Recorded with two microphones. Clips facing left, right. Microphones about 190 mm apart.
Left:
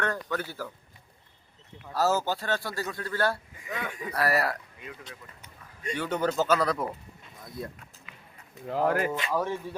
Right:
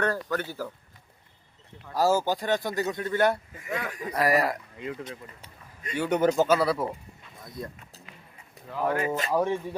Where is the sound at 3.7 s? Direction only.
Centre (ahead or behind).